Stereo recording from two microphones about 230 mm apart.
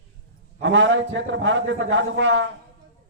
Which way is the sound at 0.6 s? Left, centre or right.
Right.